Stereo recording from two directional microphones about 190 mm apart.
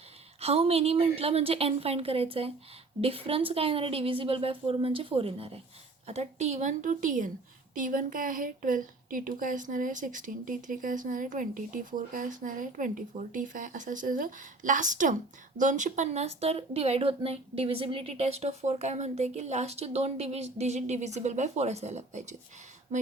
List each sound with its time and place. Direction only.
0.3 s a woman's voice: 30° right (ahead or behind)